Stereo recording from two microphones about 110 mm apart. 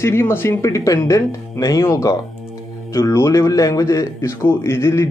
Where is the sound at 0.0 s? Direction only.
20° left (ahead or behind).